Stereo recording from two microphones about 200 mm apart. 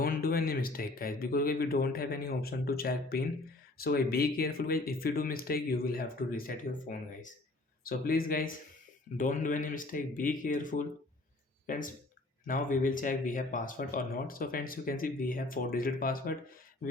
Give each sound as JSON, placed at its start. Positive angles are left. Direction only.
{"t": 0.0, "sound": "speech", "side_deg": 50}